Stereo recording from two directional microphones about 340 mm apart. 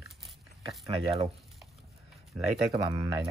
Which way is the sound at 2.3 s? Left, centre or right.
Centre.